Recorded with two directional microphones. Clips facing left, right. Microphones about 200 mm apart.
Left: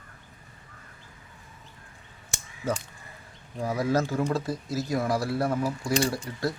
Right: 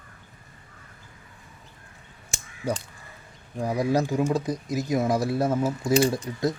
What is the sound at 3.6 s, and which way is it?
Speech, 15° right (ahead or behind).